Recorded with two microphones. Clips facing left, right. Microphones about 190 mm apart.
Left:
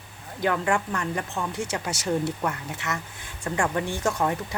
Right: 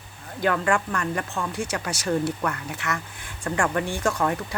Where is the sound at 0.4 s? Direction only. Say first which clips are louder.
Right 1 dB; 15° left (ahead or behind).